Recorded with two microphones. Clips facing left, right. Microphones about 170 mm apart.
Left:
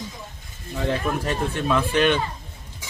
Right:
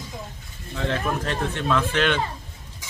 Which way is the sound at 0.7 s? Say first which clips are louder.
Left 1 dB; 15° left (ahead or behind).